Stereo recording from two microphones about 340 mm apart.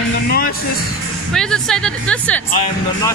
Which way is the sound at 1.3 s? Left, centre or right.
Centre.